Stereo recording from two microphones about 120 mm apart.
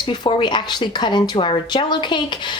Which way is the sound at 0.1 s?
45° left (ahead or behind).